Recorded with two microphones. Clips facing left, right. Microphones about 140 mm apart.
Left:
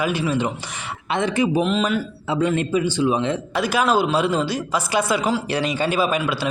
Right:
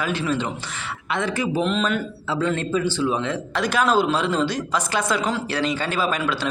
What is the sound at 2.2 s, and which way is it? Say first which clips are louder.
A man's voice: left 3 dB; 15° left (ahead or behind).